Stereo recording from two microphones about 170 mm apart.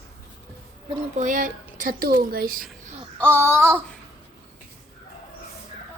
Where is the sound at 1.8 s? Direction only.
60° right (ahead or behind).